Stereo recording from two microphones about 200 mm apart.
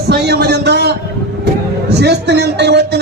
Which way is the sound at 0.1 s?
55° right (ahead or behind).